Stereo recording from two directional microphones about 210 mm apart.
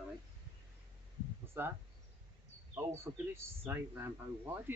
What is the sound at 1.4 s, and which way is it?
Speech, 10° right (ahead or behind).